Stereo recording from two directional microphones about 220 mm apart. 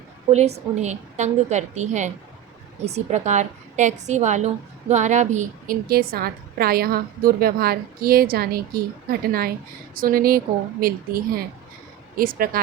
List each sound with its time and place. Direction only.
0.3 s a woman's voice: 30° right (ahead or behind)